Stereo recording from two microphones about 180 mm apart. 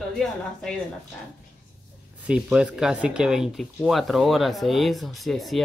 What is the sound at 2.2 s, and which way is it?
Speech, 5° right (ahead or behind).